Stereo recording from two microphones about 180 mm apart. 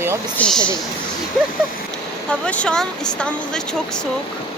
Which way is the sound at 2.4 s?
5° left (ahead or behind).